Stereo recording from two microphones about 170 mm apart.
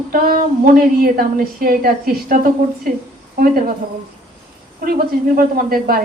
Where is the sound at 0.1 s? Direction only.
60° right (ahead or behind).